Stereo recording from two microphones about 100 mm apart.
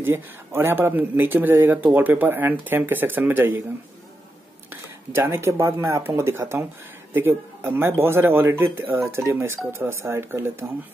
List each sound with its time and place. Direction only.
0.0 s speech: 25° right (ahead or behind)
5.1 s speech: 25° right (ahead or behind)